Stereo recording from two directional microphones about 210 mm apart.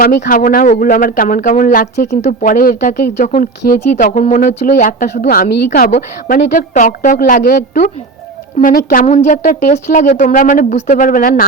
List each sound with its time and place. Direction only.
0.0 s speech: 40° left (ahead or behind)